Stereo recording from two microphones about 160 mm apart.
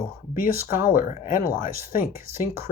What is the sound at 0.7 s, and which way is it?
Speech, 60° left (ahead or behind).